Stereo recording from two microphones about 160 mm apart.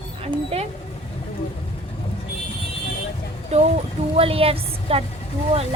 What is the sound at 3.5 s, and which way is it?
A woman's voice, 45° right (ahead or behind).